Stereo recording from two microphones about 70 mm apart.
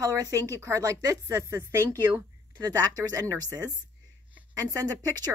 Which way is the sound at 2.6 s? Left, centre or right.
Right.